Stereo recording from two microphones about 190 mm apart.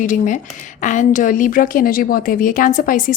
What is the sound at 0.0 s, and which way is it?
A woman's voice, 40° left (ahead or behind).